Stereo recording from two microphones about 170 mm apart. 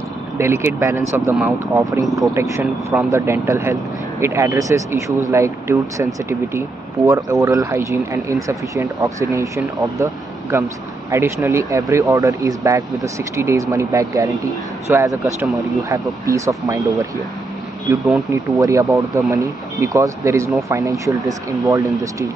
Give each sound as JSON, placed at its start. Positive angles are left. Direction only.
{"t": 0.4, "sound": "speech", "side_deg": -15}
{"t": 7.1, "sound": "speech", "side_deg": -20}